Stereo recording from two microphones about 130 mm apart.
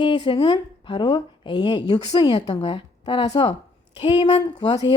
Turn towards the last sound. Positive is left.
turn(degrees=35)  # may be behind; listen again after turning